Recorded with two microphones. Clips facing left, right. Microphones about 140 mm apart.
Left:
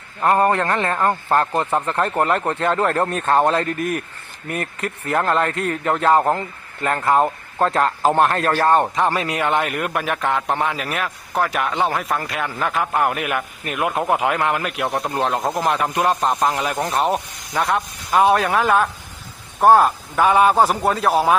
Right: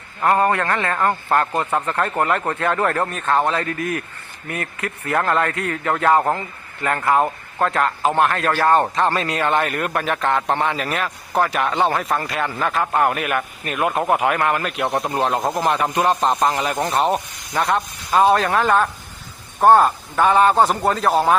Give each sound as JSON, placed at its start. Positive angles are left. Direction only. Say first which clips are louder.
{"t": 0.2, "sound": "a man's voice", "louder": "left 1 dB", "side_deg": 15}
{"t": 2.5, "sound": "a man's voice", "louder": "left 1 dB", "side_deg": 25}
{"t": 3.1, "sound": "speech", "louder": "left 2 dB", "side_deg": 40}
{"t": 3.5, "sound": "a man's voice", "louder": "left 2 dB", "side_deg": 30}
{"t": 7.6, "sound": "a man's voice", "louder": "left 2 dB", "side_deg": 30}
{"t": 8.7, "sound": "a man's voice", "louder": "even", "side_deg": 10}